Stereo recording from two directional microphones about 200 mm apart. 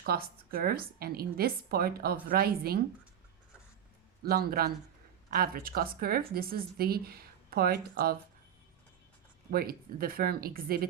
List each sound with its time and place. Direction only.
0.0 s speech: 50° right (ahead or behind)
4.2 s speech: 50° right (ahead or behind)
9.5 s speech: 50° right (ahead or behind)